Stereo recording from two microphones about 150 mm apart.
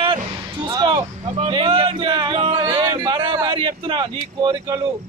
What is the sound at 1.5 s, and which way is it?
Music, 35° right (ahead or behind).